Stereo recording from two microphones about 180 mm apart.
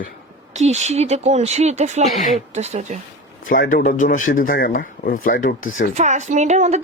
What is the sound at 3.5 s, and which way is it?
Speech, 50° left (ahead or behind).